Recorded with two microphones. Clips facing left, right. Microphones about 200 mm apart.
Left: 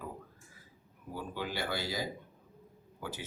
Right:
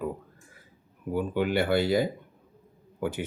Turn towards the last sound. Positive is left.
turn(degrees=-60)  # may be behind; listen again after turning